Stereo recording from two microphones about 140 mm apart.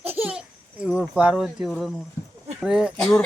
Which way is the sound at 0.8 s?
10° right (ahead or behind).